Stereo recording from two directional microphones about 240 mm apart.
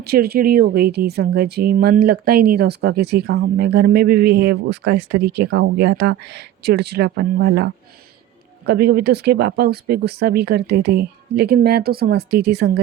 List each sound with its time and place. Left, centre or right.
0.0 s speech: right